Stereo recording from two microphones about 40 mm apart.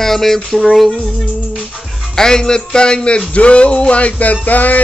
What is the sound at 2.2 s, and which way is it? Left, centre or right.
Music, centre.